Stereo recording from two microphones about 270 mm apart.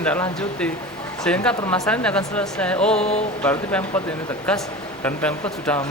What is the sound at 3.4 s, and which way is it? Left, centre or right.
Speech, centre.